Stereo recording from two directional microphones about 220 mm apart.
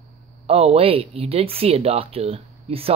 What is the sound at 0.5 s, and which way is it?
Speech, 25° right (ahead or behind).